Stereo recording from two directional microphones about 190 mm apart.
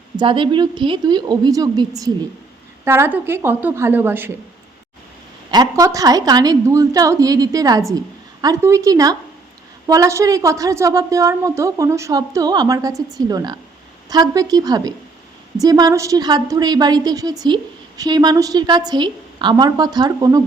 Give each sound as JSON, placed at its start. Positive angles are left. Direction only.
{"t": 0.2, "sound": "a woman's voice", "side_deg": -25}
{"t": 5.5, "sound": "a woman's voice", "side_deg": -20}